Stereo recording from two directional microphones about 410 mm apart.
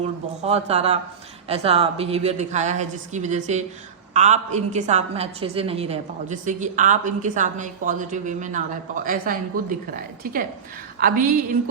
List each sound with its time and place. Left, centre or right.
0.0 s a woman's voice: centre